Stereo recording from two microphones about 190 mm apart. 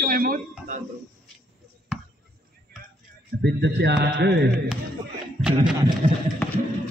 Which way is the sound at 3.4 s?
60° right (ahead or behind).